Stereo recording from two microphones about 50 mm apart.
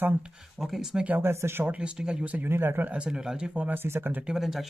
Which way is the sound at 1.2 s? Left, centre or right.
Right.